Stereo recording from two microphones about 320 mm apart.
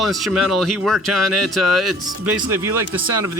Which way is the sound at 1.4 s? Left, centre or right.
Right.